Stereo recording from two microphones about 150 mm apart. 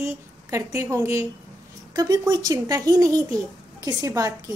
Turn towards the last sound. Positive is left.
turn(degrees=-25)  # may be behind; listen again after turning